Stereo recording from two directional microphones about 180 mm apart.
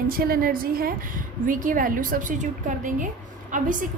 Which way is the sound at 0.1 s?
55° right (ahead or behind).